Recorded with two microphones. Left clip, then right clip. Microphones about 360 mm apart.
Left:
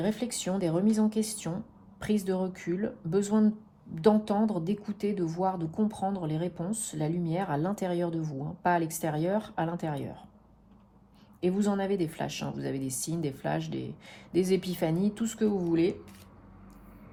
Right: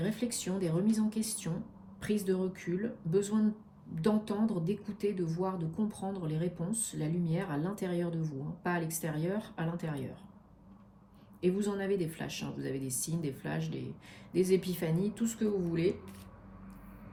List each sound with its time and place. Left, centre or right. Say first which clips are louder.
0.0 s a woman's voice: left 4 dB; left
11.3 s a woman's voice: left 3 dB; left